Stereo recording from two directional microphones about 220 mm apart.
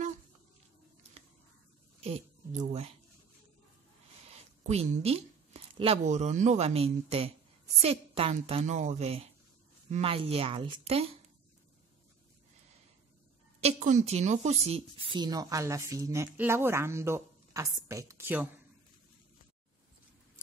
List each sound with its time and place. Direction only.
2.0 s a woman's voice: 30° right (ahead or behind)
4.3 s a woman's voice: 30° right (ahead or behind)
13.6 s a woman's voice: 30° right (ahead or behind); by 18.5 s 10° right (ahead or behind)